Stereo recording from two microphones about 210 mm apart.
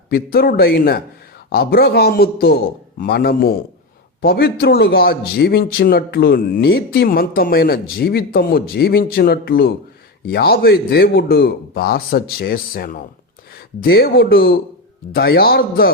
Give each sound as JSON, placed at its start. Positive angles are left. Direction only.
{"t": 0.1, "sound": "a man's voice", "side_deg": 45}